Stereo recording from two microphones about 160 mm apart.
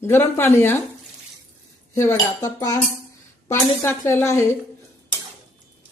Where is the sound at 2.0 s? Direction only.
15° left (ahead or behind).